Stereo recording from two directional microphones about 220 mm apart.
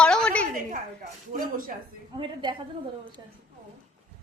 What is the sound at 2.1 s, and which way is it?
Speech, 20° right (ahead or behind).